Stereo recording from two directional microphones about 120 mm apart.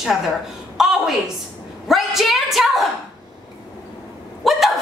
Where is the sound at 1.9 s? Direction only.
Centre (ahead or behind).